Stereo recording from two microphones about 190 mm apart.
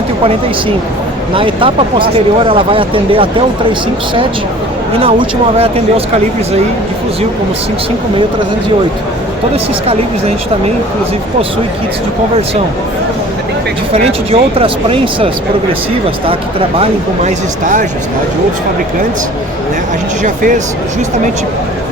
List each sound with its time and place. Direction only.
1.4 s speech: 25° right (ahead or behind)
13.9 s speech: 30° right (ahead or behind)
17.2 s speech: 40° right (ahead or behind)
20.2 s speech: 45° right (ahead or behind)